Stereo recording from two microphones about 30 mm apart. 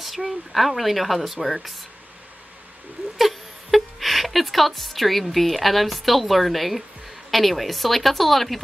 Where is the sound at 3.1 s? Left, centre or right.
Centre.